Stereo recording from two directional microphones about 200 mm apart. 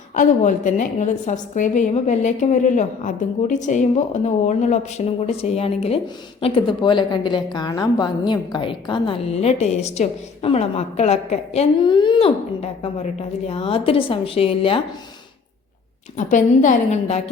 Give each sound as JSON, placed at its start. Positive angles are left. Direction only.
{"t": 0.1, "sound": "a woman's voice", "side_deg": 40}
{"t": 16.1, "sound": "a woman's voice", "side_deg": 40}